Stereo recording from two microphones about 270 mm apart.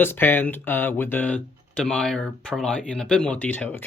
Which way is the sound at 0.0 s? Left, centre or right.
Centre.